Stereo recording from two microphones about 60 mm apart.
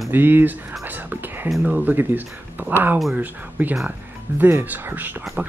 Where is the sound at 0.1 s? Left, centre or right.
Right.